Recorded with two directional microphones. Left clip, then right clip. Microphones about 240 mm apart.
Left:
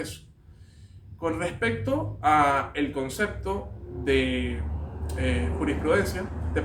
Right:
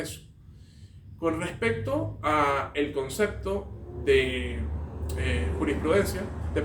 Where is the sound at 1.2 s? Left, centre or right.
Centre.